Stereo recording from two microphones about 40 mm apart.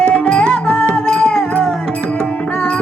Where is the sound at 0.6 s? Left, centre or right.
Left.